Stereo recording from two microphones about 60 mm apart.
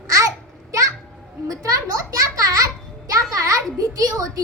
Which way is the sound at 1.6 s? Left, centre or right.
Right.